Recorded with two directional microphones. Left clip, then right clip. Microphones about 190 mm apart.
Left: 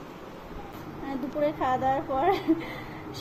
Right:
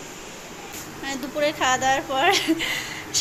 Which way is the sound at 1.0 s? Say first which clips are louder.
Right 4 dB; centre (ahead or behind).